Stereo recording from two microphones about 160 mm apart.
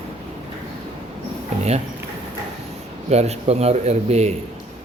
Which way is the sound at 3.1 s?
40° right (ahead or behind).